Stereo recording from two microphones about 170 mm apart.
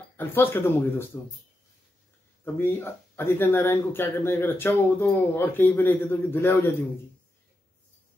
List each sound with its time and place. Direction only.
0.2 s speech: 10° left (ahead or behind)
2.4 s speech: 15° left (ahead or behind)